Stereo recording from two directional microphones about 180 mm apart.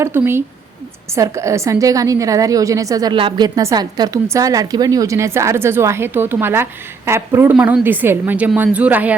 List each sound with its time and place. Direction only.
0.0 s a woman's voice: 15° right (ahead or behind)